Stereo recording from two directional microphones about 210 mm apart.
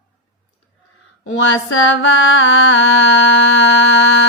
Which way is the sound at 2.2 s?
65° left (ahead or behind).